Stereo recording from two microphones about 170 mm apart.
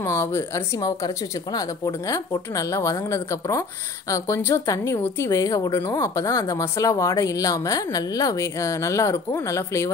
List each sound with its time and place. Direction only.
0.0 s a woman's voice: 15° left (ahead or behind)